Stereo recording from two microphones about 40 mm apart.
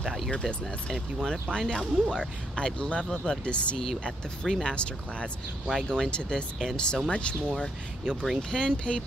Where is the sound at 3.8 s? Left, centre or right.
Centre.